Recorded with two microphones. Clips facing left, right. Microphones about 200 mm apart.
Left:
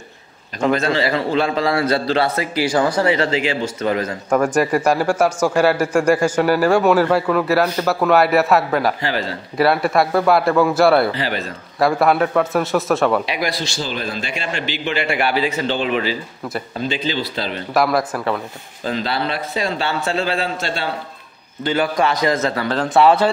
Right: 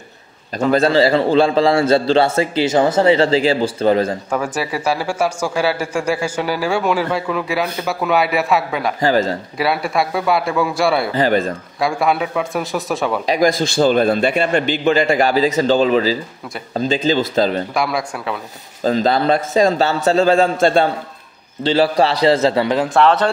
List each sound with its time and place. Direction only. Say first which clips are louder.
0.7 s a man's voice: right 4 dB; 35° right (ahead or behind)
4.4 s a man's voice: left 5 dB; 10° right (ahead or behind)
9.0 s a man's voice: right 7 dB; 45° right (ahead or behind)
9.6 s a man's voice: left 4 dB; centre (ahead or behind)
11.1 s a man's voice: right 8 dB; 50° right (ahead or behind)
11.8 s a man's voice: left 2 dB; centre (ahead or behind)
13.2 s a man's voice: right 7 dB; 45° right (ahead or behind)
14.5 s a man's voice: right 8 dB; 45° right (ahead or behind)
17.7 s a man's voice: left 3 dB; centre (ahead or behind)
18.9 s a man's voice: right 7 dB; 45° right (ahead or behind)
21.6 s a man's voice: right 4 dB; 30° right (ahead or behind)
22.9 s a man's voice: left 2 dB; 5° left (ahead or behind)